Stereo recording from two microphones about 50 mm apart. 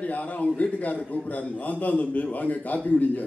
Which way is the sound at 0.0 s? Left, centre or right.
Left.